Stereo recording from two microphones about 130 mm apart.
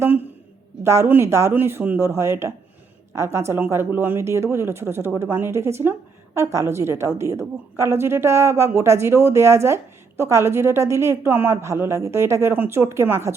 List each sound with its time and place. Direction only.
0.8 s a woman's voice: 20° right (ahead or behind)